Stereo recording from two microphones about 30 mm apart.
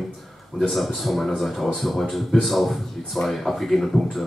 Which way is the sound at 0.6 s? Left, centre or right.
Centre.